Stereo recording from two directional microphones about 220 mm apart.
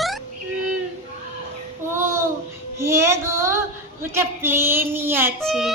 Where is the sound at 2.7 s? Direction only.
10° right (ahead or behind).